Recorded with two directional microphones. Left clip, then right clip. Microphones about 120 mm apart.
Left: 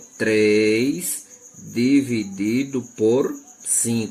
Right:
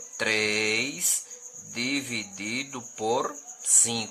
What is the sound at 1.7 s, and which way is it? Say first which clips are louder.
Speech: left 10 dB; 45° right (ahead or behind).